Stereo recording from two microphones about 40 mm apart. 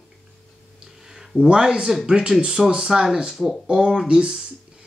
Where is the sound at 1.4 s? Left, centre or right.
Right.